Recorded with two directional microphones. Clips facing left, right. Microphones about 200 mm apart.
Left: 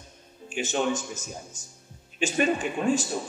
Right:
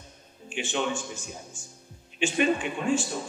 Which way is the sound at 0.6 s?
40° left (ahead or behind).